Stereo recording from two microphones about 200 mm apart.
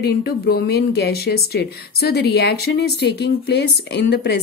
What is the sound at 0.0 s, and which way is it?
Speech, 55° left (ahead or behind).